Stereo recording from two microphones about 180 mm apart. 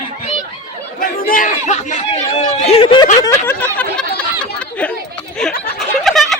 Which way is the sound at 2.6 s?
35° left (ahead or behind).